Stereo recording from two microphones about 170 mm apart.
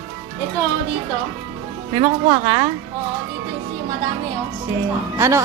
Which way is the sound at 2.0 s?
25° right (ahead or behind).